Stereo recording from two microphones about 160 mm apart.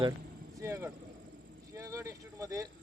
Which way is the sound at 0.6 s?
15° right (ahead or behind).